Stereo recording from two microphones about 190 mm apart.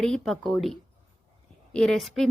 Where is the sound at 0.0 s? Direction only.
Centre (ahead or behind).